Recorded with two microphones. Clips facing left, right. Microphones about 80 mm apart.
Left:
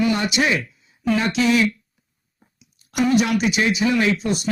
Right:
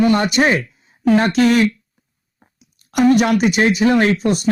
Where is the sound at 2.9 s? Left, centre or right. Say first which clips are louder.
Right 5 dB; right.